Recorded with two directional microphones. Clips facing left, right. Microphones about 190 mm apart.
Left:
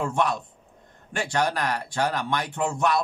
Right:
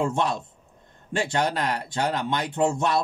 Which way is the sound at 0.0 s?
25° right (ahead or behind).